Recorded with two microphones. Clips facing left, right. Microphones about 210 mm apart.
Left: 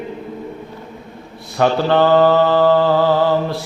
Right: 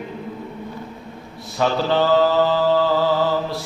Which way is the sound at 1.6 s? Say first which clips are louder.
Left 5 dB; 60° left (ahead or behind).